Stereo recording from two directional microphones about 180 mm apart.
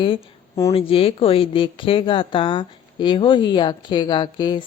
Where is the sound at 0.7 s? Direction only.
30° left (ahead or behind).